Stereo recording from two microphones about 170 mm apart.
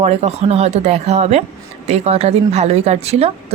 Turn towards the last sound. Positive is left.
turn(degrees=-40)  # may be behind; listen again after turning